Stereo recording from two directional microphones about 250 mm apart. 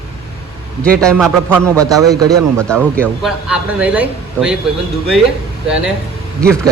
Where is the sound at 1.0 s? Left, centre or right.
Centre.